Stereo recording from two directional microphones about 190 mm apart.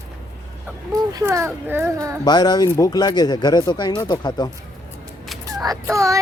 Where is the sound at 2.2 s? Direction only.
20° left (ahead or behind).